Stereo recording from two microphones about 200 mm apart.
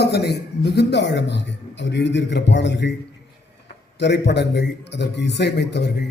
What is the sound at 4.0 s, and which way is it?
A man's voice, 60° left (ahead or behind).